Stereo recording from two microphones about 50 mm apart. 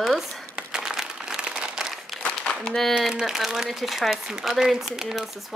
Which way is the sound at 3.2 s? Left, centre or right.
Centre.